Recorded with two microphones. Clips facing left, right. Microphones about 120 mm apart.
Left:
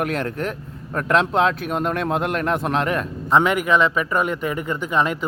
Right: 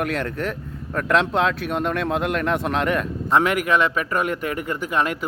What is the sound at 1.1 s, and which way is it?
Speech, centre (ahead or behind).